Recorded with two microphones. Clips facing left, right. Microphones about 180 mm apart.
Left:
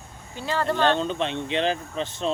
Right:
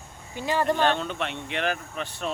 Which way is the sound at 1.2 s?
20° left (ahead or behind).